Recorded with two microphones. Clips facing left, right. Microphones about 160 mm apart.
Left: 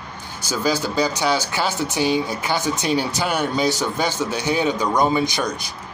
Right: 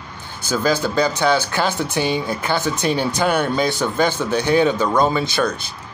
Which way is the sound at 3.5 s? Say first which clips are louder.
Right 1 dB; 55° right (ahead or behind).